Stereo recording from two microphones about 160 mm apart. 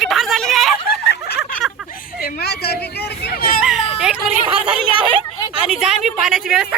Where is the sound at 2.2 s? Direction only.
85° left.